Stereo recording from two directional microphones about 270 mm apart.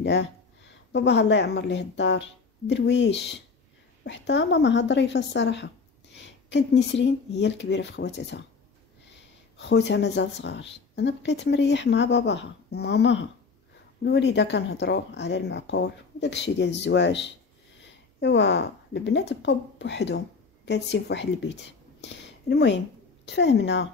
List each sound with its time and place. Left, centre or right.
0.0 s speech: left